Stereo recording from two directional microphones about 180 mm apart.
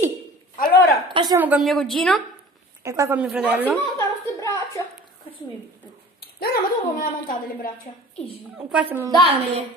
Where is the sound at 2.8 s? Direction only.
15° right (ahead or behind).